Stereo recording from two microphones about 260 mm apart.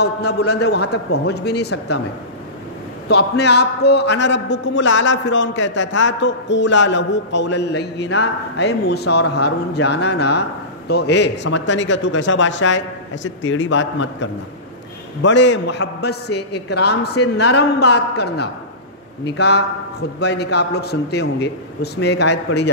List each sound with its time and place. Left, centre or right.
0.0 s a man's voice: left
3.1 s a man's voice: left